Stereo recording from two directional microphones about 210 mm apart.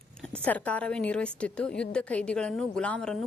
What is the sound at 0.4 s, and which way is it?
A woman's voice, 5° left (ahead or behind).